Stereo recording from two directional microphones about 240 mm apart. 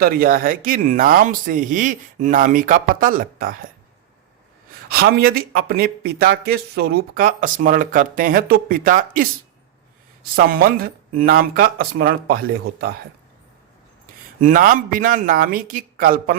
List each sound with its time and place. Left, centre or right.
0.0 s speech: right
4.9 s speech: right
10.3 s speech: right
14.4 s speech: right